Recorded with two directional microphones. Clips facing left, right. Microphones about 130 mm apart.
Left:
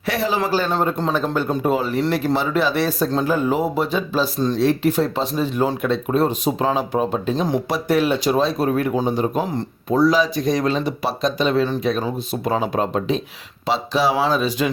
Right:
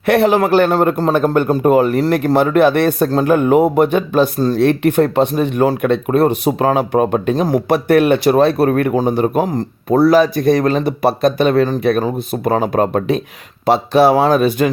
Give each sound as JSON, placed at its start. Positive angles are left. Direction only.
{"t": 0.0, "sound": "speech", "side_deg": -60}
{"t": 7.4, "sound": "speech", "side_deg": -50}
{"t": 10.0, "sound": "speech", "side_deg": -55}